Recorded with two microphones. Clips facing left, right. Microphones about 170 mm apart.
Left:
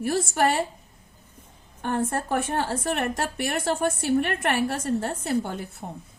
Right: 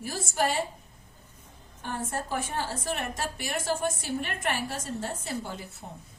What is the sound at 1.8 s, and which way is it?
A woman's voice, 60° left (ahead or behind).